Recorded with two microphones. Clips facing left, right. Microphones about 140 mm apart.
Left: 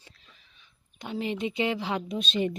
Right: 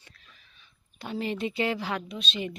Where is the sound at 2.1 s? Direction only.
45° left (ahead or behind).